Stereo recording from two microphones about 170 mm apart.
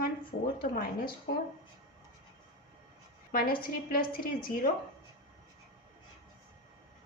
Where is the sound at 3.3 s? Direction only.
60° left (ahead or behind).